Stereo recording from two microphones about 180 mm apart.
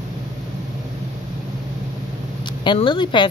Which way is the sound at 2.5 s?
25° left (ahead or behind).